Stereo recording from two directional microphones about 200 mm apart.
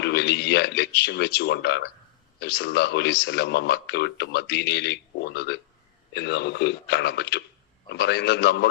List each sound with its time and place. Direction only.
0.0 s a man's voice: 55° left (ahead or behind)